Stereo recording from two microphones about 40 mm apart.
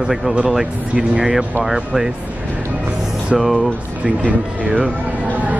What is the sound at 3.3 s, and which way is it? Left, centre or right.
Speech, centre.